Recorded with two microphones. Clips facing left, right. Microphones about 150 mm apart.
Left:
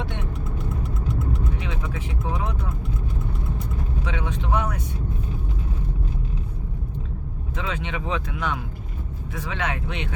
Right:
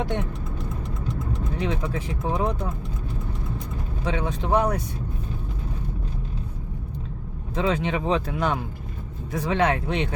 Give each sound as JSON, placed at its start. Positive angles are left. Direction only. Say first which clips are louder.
{"t": 1.5, "sound": "vehicle", "louder": "right 5 dB", "side_deg": -40}
{"t": 4.0, "sound": "speech", "louder": "right 6 dB", "side_deg": -35}
{"t": 7.5, "sound": "speech", "louder": "right 7 dB", "side_deg": -35}